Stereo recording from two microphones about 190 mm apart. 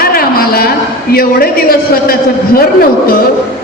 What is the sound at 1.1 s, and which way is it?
Speech, 50° left (ahead or behind).